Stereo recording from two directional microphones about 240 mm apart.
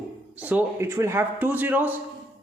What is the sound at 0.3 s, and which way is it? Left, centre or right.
Speech, centre.